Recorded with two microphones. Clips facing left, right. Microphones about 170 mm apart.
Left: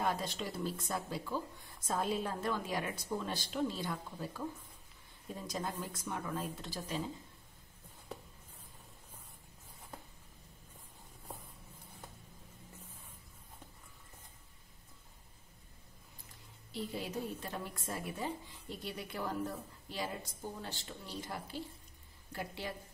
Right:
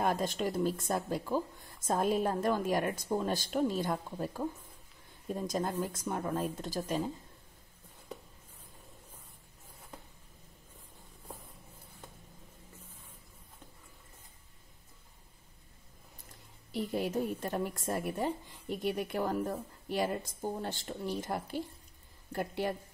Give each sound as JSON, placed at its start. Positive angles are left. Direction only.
{"t": 0.0, "sound": "a woman's voice", "side_deg": -50}
{"t": 5.3, "sound": "a woman's voice", "side_deg": -45}
{"t": 16.7, "sound": "a woman's voice", "side_deg": -50}